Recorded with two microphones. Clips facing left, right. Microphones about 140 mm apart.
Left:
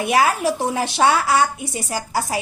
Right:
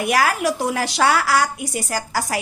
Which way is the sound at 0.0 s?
25° left (ahead or behind).